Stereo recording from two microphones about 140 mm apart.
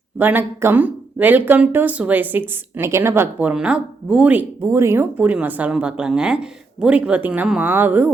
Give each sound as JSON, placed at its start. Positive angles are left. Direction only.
{"t": 0.2, "sound": "speech", "side_deg": -15}